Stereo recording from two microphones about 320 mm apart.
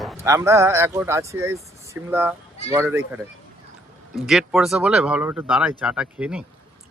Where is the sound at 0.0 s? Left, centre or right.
Centre.